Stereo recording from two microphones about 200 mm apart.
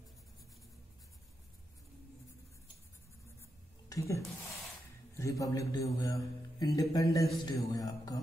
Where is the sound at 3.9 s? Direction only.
15° left (ahead or behind).